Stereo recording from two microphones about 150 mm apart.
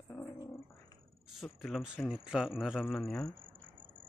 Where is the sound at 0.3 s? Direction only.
15° left (ahead or behind).